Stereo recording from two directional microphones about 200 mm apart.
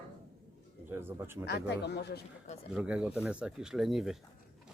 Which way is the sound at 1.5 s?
55° left (ahead or behind).